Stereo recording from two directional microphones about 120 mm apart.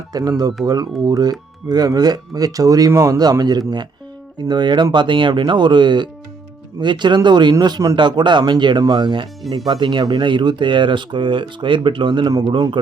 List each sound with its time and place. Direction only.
0.1 s speech: 30° right (ahead or behind)